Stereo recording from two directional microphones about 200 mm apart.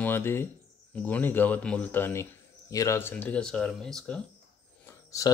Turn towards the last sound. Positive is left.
turn(degrees=15)  # may be behind; listen again after turning